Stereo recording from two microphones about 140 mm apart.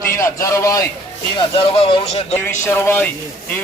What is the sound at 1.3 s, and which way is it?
Speech, 40° left (ahead or behind).